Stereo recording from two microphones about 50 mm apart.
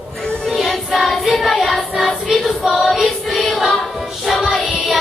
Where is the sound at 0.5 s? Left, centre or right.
Centre.